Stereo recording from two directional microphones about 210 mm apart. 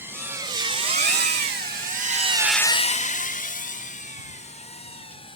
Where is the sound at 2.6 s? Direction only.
25° left (ahead or behind).